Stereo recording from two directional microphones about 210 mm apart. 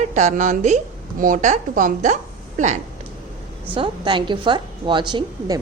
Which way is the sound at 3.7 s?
25° right (ahead or behind).